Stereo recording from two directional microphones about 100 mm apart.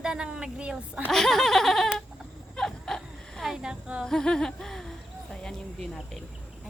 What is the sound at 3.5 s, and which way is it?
Speech, 10° right (ahead or behind).